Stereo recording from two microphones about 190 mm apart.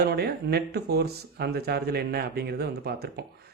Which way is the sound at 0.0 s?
55° right (ahead or behind).